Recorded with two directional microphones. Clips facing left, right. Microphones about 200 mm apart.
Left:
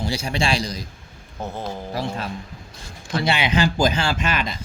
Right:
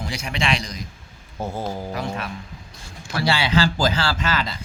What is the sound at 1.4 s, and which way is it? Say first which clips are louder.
Speech: right 2 dB; 10° right (ahead or behind).